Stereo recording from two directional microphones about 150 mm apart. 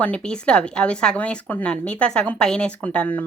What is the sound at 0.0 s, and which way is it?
A woman's voice, 5° left (ahead or behind).